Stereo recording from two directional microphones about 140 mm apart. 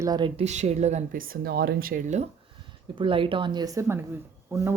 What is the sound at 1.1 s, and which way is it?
Speech, 90° right.